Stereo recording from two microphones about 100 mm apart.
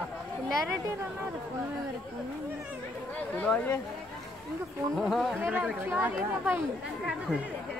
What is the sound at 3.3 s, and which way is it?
Speech, 15° left (ahead or behind).